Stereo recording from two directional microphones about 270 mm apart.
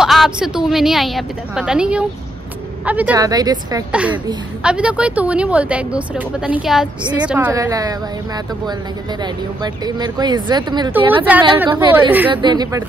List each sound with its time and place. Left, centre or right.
0.0 s speech: centre
9.2 s speech: centre
11.4 s speech: centre